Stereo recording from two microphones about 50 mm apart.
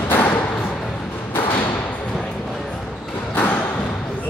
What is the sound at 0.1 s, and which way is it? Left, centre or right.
Music, left.